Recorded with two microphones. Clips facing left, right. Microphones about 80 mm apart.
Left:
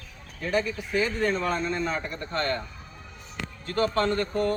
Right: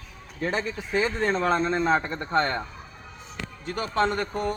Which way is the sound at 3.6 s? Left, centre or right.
Centre.